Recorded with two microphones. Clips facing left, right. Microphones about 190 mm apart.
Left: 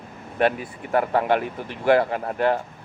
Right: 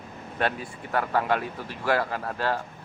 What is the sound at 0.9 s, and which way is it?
Speech, 25° left (ahead or behind).